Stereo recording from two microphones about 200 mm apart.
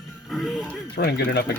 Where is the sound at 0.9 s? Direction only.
55° left (ahead or behind).